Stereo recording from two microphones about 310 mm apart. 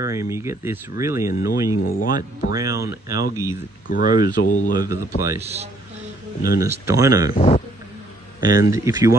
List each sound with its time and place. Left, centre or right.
0.0 s speech: centre
2.0 s speech: left
2.5 s speech: centre
3.8 s speech: left
4.7 s a man's voice: centre
7.3 s a man's voice: left
8.4 s speech: centre